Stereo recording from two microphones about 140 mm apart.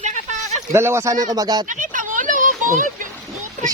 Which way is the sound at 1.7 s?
70° right (ahead or behind).